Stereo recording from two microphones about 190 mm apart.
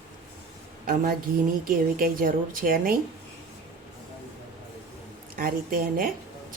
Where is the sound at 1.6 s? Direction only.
50° right (ahead or behind).